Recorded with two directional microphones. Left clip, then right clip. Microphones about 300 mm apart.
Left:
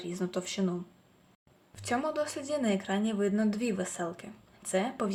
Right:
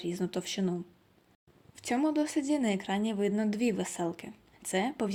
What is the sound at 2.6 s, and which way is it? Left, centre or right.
Speech, right.